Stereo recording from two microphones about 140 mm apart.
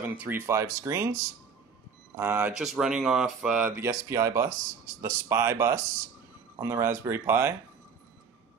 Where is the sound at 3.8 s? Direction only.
20° right (ahead or behind).